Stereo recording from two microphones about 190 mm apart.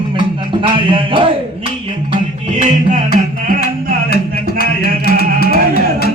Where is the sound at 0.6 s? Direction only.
25° right (ahead or behind).